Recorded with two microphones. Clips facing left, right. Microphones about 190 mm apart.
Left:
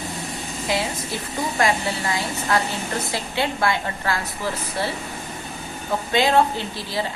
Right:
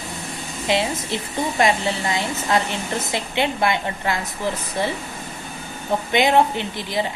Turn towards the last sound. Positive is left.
turn(degrees=-20)  # may be behind; listen again after turning